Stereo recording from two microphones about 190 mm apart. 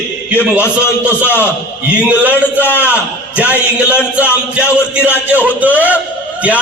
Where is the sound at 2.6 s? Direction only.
10° left (ahead or behind).